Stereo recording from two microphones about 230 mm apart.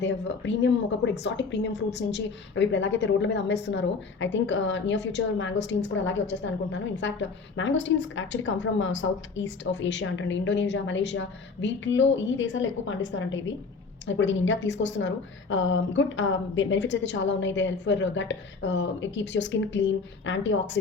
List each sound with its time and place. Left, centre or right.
0.0 s a woman's voice: left